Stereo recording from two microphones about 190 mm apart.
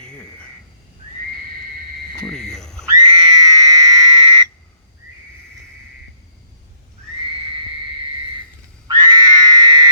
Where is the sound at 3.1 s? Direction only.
20° right (ahead or behind).